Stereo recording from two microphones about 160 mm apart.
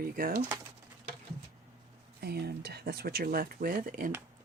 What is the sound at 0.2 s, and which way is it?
Speech, 60° right (ahead or behind).